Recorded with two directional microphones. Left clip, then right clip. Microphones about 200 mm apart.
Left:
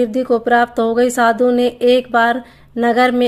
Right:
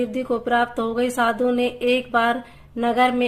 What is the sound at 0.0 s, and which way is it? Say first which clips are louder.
Speech: left 8 dB; 35° left (ahead or behind).